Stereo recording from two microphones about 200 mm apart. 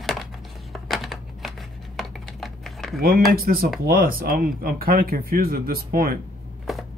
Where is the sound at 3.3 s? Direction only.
45° right (ahead or behind).